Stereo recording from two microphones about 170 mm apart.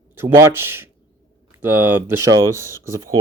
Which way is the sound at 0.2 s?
15° right (ahead or behind).